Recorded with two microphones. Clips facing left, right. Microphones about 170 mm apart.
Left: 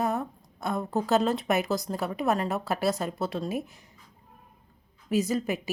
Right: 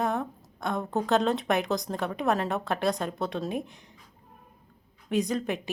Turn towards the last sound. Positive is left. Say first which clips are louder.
# left 1 dB
turn(degrees=5)  # may be behind; listen again after turning